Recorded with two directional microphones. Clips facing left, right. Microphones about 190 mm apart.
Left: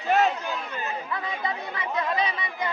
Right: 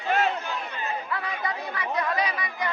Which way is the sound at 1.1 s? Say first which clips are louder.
Even; 20° left (ahead or behind).